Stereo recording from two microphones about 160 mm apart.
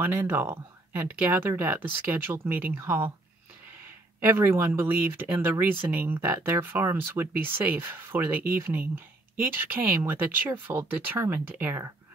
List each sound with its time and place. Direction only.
0.0 s speech: 10° right (ahead or behind)
4.3 s speech: 15° right (ahead or behind)